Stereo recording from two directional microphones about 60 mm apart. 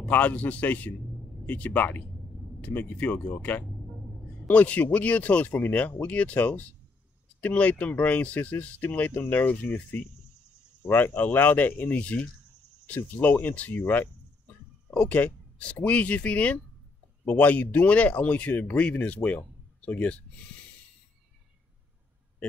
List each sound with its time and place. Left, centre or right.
0.1 s speech: left